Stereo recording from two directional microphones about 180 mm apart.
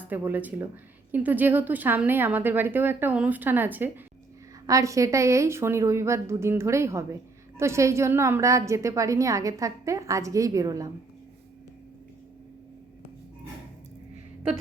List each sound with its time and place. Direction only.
0.1 s a woman's voice: 10° right (ahead or behind)